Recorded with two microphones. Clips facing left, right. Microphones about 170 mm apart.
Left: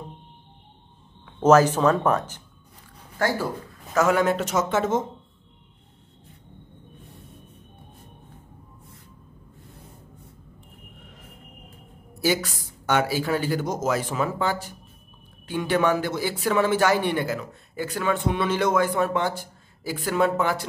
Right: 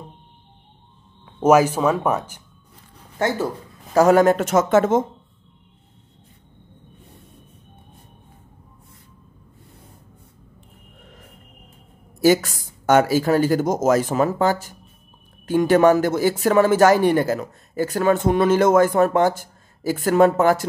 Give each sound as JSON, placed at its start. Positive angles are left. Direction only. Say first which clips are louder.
{"t": 1.4, "sound": "speech", "louder": "right 1 dB", "side_deg": -10}
{"t": 3.2, "sound": "speech", "louder": "right 3 dB", "side_deg": -20}
{"t": 3.9, "sound": "speech", "louder": "right 7 dB", "side_deg": -40}
{"t": 12.2, "sound": "speech", "louder": "right 8 dB", "side_deg": -45}